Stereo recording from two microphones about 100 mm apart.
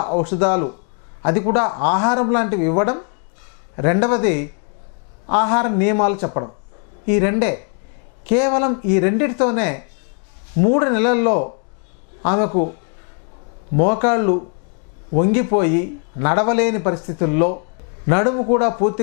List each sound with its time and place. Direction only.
0.0 s a man's voice: 20° left (ahead or behind)
13.7 s speech: 20° left (ahead or behind)